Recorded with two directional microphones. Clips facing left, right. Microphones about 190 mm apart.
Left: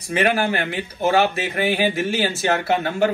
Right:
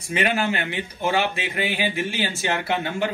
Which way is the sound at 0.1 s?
45° left (ahead or behind).